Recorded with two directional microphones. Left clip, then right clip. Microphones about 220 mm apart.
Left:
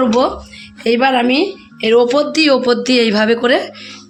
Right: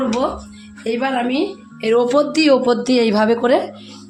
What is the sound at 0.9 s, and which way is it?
Speech, 35° left (ahead or behind).